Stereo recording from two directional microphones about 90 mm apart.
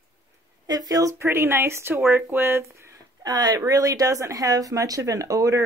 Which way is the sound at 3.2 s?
45° right (ahead or behind).